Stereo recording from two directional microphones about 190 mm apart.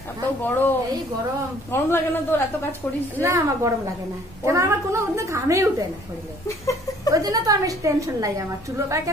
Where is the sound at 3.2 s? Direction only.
15° right (ahead or behind).